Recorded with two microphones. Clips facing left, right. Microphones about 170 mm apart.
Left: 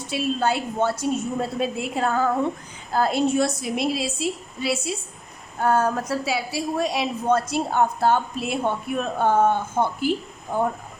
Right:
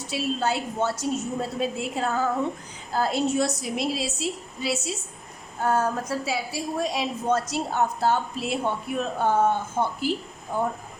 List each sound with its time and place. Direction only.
0.1 s a woman's voice: 55° left (ahead or behind)